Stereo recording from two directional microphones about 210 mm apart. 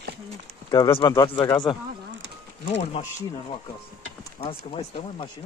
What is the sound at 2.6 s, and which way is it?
Speech, 30° left (ahead or behind).